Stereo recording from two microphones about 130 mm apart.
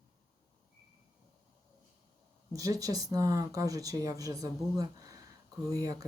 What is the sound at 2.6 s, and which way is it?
Speech, 25° right (ahead or behind).